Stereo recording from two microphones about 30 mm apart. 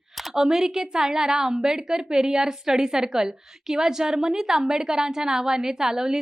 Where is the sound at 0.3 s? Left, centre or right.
Centre.